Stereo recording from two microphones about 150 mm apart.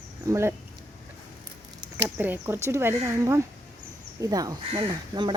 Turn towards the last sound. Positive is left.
turn(degrees=-30)  # may be behind; listen again after turning